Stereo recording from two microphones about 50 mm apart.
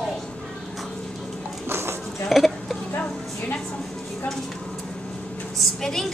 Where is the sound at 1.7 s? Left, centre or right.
Right.